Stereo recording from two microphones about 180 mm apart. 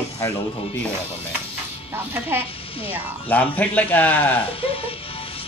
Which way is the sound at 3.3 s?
10° left (ahead or behind).